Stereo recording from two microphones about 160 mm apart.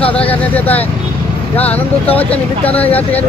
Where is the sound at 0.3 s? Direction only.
10° left (ahead or behind).